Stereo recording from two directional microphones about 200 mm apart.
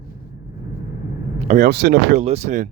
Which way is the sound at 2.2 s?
35° right (ahead or behind).